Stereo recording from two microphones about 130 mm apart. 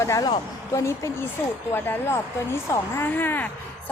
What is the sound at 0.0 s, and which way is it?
A woman's voice, 20° left (ahead or behind).